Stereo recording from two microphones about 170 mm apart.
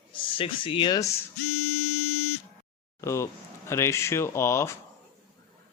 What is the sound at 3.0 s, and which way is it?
Speech, 15° left (ahead or behind).